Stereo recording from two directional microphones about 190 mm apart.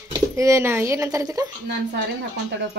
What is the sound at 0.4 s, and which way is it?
A woman's voice, 15° right (ahead or behind).